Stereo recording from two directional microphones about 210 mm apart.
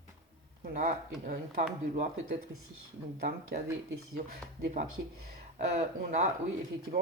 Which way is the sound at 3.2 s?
40° right (ahead or behind).